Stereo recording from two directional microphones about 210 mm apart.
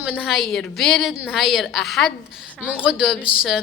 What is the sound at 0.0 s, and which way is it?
A woman's voice, 5° right (ahead or behind).